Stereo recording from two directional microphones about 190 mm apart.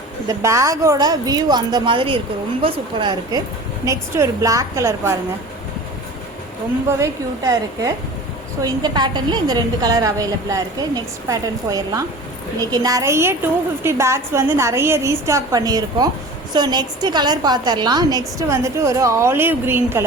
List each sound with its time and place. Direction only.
0.3 s a woman's voice: 15° right (ahead or behind)
7.0 s a woman's voice: 15° right (ahead or behind)